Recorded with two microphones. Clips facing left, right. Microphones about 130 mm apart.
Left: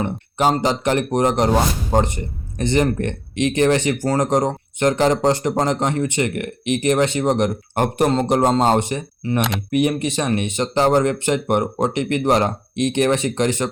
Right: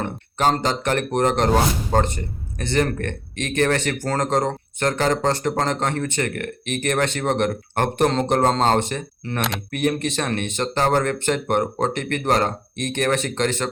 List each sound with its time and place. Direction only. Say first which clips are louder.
0.0 s speech: left 2 dB; 10° left (ahead or behind)